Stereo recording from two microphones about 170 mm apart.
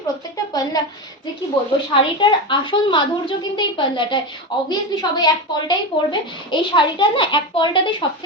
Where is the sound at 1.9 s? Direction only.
30° left (ahead or behind).